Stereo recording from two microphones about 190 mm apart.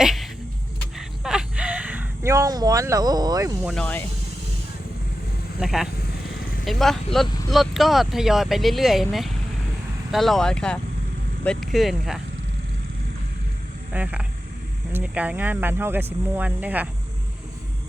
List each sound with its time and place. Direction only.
0.0 s a sound: centre (ahead or behind); by 3.7 s 20° right (ahead or behind)
3.7 s speech: 5° left (ahead or behind)
5.5 s speech: centre (ahead or behind)
13.9 s speech: 5° right (ahead or behind)